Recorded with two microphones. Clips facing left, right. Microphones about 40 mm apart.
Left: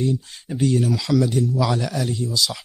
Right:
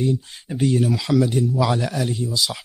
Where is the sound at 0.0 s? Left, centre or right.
Centre.